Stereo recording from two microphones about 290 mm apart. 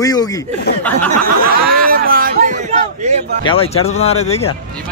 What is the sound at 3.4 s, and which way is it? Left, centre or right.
Speech, centre.